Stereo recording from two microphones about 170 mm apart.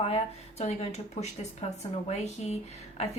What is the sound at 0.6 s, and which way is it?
A woman's voice, 40° left (ahead or behind).